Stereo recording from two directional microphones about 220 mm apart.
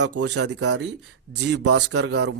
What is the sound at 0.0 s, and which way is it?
Speech, 55° right (ahead or behind).